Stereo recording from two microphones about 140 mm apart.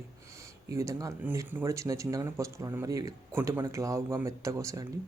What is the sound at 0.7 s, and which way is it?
Speech, 25° right (ahead or behind).